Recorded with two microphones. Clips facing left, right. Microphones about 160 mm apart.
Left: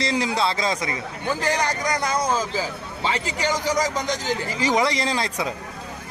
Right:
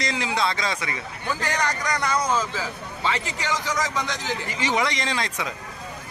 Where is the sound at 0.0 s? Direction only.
35° left (ahead or behind).